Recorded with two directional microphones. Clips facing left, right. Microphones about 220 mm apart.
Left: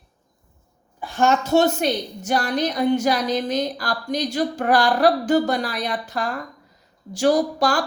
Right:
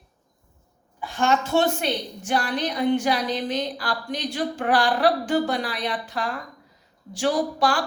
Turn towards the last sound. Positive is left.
turn(degrees=40)  # may be behind; listen again after turning